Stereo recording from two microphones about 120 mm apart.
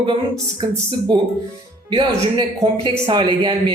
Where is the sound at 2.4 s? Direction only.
45° right (ahead or behind).